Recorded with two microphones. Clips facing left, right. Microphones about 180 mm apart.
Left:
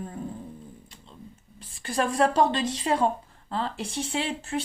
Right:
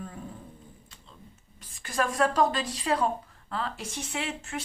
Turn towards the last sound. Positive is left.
turn(degrees=30)  # may be behind; listen again after turning